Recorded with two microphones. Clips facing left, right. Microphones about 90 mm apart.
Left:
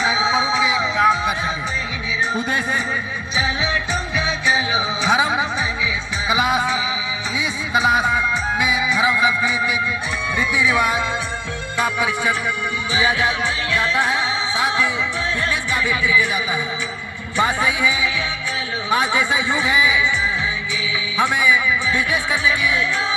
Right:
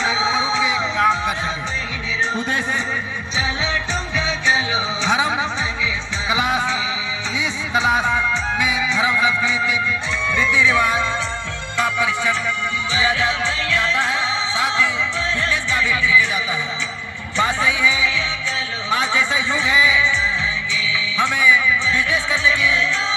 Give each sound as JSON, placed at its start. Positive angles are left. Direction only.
{"t": 0.0, "sound": "music", "side_deg": 10}
{"t": 2.3, "sound": "music", "side_deg": 10}
{"t": 21.2, "sound": "speech", "side_deg": 20}